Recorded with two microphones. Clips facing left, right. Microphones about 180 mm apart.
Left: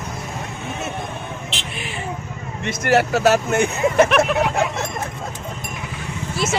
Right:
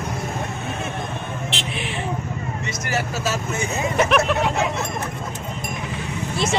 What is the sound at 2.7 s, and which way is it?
Speech, 65° left (ahead or behind).